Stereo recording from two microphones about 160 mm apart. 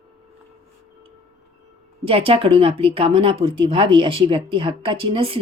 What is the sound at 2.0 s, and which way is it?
Speech, 35° right (ahead or behind).